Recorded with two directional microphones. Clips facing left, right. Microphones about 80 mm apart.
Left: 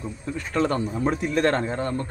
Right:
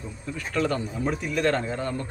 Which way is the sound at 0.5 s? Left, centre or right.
Left.